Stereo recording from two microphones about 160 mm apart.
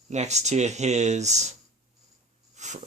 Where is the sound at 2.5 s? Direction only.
45° right (ahead or behind).